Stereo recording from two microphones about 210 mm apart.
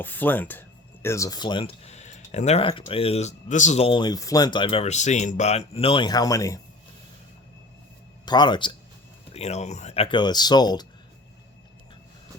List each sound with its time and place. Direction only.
0.0 s speech: 10° left (ahead or behind)
8.2 s speech: 20° left (ahead or behind)